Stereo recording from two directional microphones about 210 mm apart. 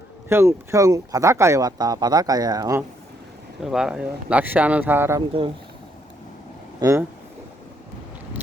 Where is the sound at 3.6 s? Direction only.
5° right (ahead or behind).